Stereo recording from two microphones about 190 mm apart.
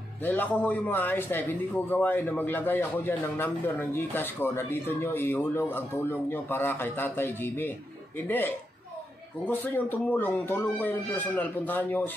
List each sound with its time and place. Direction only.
0.2 s a man's voice: 10° left (ahead or behind)